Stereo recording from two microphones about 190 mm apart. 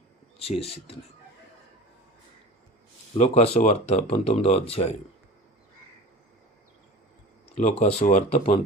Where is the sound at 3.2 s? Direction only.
35° left (ahead or behind).